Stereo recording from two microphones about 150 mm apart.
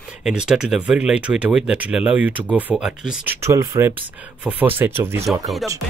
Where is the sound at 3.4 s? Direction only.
20° right (ahead or behind).